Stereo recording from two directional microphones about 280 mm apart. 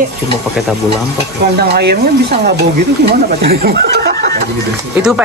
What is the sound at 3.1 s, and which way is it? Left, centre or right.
Speech, right.